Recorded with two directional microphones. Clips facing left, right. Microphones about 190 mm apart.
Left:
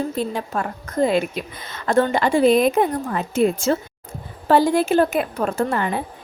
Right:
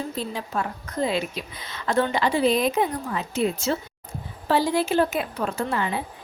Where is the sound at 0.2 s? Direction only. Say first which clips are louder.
Left 4 dB; 50° left (ahead or behind).